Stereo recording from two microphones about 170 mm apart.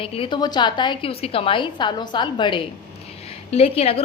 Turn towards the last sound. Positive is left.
turn(degrees=35)  # may be behind; listen again after turning